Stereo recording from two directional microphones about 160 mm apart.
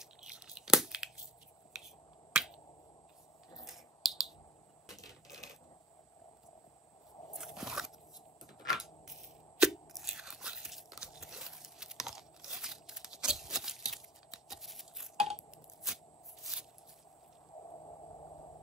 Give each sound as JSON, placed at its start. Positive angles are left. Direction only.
{"t": 0.0, "sound": "a sound", "side_deg": -5}
{"t": 2.3, "sound": "finger snapping", "side_deg": -5}
{"t": 3.6, "sound": "finger snapping", "side_deg": 0}
{"t": 5.0, "sound": "coin", "side_deg": 20}
{"t": 7.3, "sound": "crunch", "side_deg": -5}
{"t": 17.6, "sound": "a sound", "side_deg": 25}